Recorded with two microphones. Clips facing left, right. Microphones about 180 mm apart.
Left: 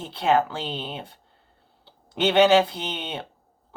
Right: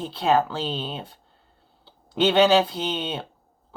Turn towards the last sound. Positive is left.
turn(degrees=20)  # may be behind; listen again after turning